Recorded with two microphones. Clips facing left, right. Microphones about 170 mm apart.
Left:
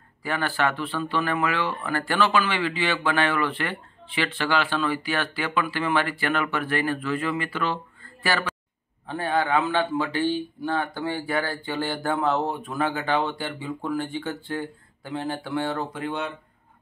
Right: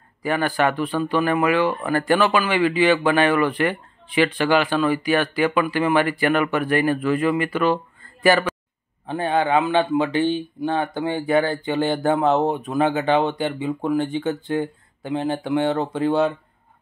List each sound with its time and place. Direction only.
0.2 s a man's voice: 15° right (ahead or behind); by 16.3 s 30° right (ahead or behind)